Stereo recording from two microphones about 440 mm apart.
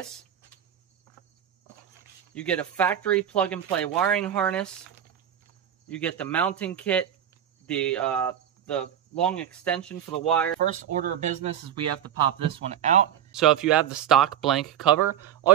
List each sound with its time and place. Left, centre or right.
2.3 s speech: centre
5.9 s speech: centre
10.9 s speech: centre
13.3 s speech: centre